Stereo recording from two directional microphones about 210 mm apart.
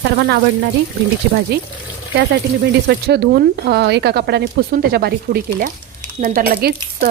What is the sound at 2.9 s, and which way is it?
Speech, 50° right (ahead or behind).